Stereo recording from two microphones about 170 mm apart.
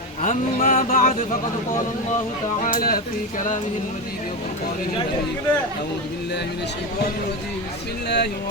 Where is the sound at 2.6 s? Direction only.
55° left (ahead or behind).